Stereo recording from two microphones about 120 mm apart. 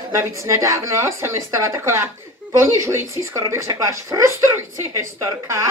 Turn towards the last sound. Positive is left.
turn(degrees=-25)  # may be behind; listen again after turning